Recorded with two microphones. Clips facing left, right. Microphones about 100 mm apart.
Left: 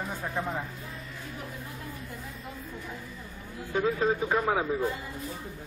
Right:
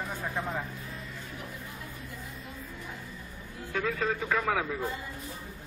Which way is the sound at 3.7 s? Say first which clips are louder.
Left 4 dB; 15° left (ahead or behind).